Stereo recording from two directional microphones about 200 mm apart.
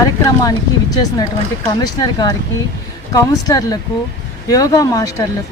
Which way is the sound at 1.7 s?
20° left (ahead or behind).